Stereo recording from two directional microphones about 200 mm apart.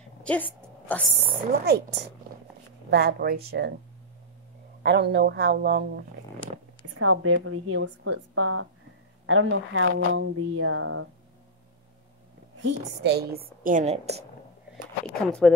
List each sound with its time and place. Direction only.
0.2 s a sound: 5° left (ahead or behind)
1.5 s a woman's voice: 50° right (ahead or behind)
2.9 s a woman's voice: 55° right (ahead or behind)
4.8 s speech: 55° right (ahead or behind)
7.0 s speech: 90° right
12.5 s a woman's voice: 55° right (ahead or behind); by 14.2 s 30° right (ahead or behind)
15.4 s speech: centre (ahead or behind)